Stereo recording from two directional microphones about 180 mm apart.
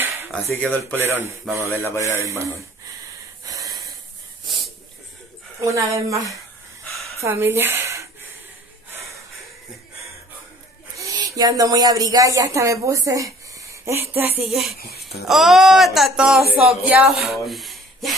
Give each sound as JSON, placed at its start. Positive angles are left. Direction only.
{"t": 0.3, "sound": "speech", "side_deg": 5}
{"t": 1.5, "sound": "a woman's voice", "side_deg": -15}
{"t": 3.4, "sound": "wheeze", "side_deg": -20}
{"t": 5.6, "sound": "a woman's voice", "side_deg": -15}
{"t": 11.0, "sound": "speech", "side_deg": -20}
{"t": 14.1, "sound": "music", "side_deg": -10}
{"t": 14.8, "sound": "speech", "side_deg": 65}
{"t": 15.2, "sound": "music", "side_deg": 0}
{"t": 16.5, "sound": "a woman's voice", "side_deg": -5}